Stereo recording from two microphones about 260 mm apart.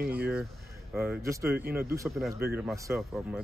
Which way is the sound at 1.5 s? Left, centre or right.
Right.